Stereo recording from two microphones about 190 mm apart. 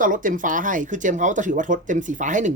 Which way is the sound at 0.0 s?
45° right (ahead or behind).